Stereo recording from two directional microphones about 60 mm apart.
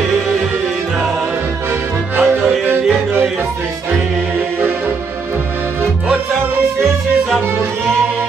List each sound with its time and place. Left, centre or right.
2.1 s music: right